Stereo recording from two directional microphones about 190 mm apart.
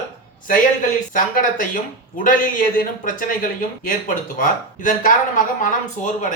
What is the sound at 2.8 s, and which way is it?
Speech, 45° left (ahead or behind).